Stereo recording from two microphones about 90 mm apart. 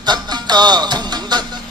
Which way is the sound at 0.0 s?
50° right (ahead or behind).